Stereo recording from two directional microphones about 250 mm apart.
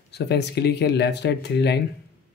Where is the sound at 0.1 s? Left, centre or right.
Left.